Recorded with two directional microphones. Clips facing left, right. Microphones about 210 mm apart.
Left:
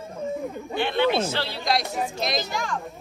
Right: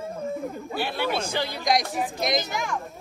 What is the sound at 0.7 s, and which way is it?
A woman's voice, 5° right (ahead or behind).